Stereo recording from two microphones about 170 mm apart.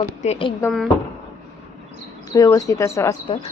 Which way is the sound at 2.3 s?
20° left (ahead or behind).